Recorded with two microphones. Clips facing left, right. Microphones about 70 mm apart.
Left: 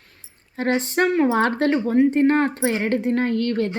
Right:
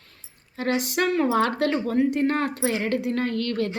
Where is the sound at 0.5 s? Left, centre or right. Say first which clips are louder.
Left 3 dB; left.